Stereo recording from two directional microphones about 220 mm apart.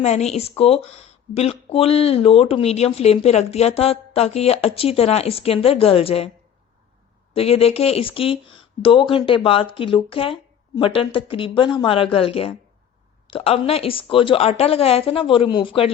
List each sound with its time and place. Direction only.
0.0 s speech: 30° left (ahead or behind)
7.3 s speech: 25° left (ahead or behind)